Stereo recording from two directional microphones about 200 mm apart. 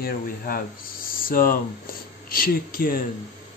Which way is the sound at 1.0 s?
45° left (ahead or behind).